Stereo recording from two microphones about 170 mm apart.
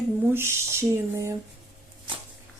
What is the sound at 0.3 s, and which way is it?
Speech, 15° right (ahead or behind).